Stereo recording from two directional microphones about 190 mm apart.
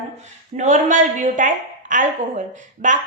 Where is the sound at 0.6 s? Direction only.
40° right (ahead or behind).